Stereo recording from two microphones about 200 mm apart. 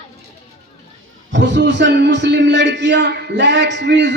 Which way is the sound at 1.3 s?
60° right (ahead or behind).